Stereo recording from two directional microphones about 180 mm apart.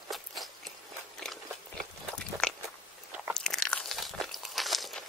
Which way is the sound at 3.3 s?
5° left (ahead or behind).